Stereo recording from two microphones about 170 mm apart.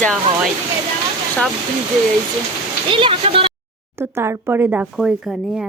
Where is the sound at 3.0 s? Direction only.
30° right (ahead or behind).